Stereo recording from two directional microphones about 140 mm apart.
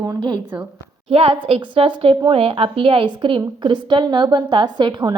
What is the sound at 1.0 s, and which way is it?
A woman's voice, 45° right (ahead or behind).